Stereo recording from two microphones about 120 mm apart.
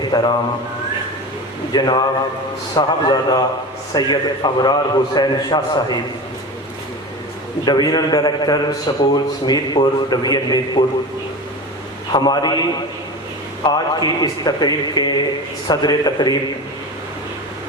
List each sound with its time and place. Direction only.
0.1 s mantra: 40° left (ahead or behind)
1.7 s a man's voice: 35° left (ahead or behind)
7.6 s a man's voice: 35° left (ahead or behind)
12.1 s a man's voice: 35° left (ahead or behind)
13.7 s a man's voice: 35° left (ahead or behind)